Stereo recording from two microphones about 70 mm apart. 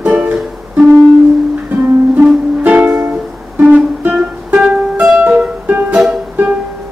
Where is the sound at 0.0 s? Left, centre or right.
Right.